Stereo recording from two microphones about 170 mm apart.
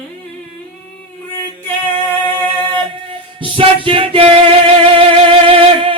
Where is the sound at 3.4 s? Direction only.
30° right (ahead or behind).